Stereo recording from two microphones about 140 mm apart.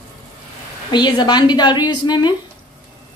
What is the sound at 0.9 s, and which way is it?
A woman's voice, 30° left (ahead or behind).